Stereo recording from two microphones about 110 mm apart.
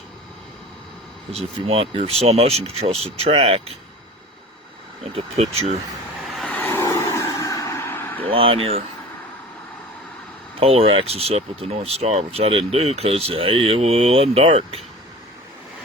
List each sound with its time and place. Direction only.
1.3 s speech: 65° right (ahead or behind)
5.1 s speech: 70° right (ahead or behind)
6.5 s vehicle: 15° left (ahead or behind)
6.8 s roar: 25° left (ahead or behind)
8.3 s speech: 55° right (ahead or behind)
10.6 s speech: 60° right (ahead or behind)